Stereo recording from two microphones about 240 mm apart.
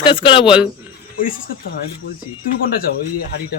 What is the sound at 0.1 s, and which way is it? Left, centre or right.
Speech, left.